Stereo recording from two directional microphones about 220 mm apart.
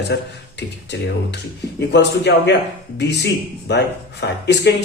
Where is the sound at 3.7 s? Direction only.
50° left (ahead or behind).